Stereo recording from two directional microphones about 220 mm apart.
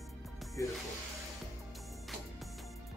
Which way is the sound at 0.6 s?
15° left (ahead or behind).